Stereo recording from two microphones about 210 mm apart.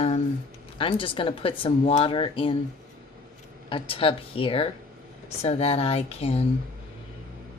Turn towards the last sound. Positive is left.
turn(degrees=30)  # may be behind; listen again after turning